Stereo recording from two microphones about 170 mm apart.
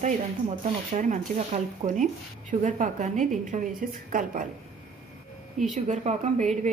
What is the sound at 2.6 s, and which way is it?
A woman's voice, 45° right (ahead or behind).